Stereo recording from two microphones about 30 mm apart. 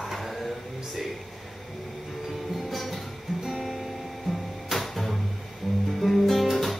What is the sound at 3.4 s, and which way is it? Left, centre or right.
Music, centre.